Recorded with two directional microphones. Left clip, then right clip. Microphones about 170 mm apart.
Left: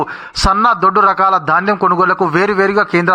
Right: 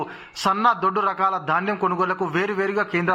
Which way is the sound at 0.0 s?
35° left (ahead or behind).